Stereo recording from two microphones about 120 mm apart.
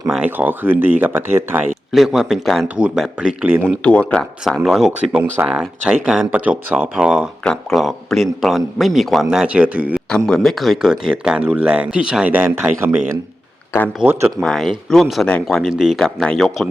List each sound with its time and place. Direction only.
0.1 s speech: 10° right (ahead or behind)
1.9 s a man's voice: 5° right (ahead or behind)
3.8 s a man's voice: 10° left (ahead or behind); by 10.0 s 10° right (ahead or behind)
10.1 s speech: 5° left (ahead or behind); by 13.0 s 15° right (ahead or behind)
14.0 s speech: 20° right (ahead or behind)
14.3 s a man's voice: centre (ahead or behind)